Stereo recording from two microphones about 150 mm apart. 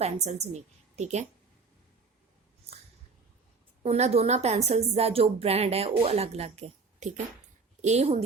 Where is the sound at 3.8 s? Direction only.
45° right (ahead or behind).